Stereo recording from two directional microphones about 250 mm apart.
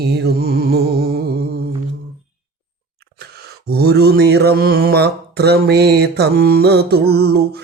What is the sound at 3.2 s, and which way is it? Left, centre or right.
Mantra, right.